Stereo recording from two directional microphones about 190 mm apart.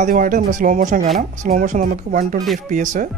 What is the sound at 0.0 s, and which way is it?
Speech, 45° right (ahead or behind).